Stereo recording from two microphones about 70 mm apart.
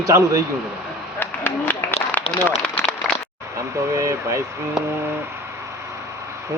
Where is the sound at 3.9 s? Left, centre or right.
Right.